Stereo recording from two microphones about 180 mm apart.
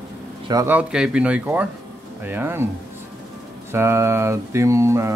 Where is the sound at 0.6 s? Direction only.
10° right (ahead or behind).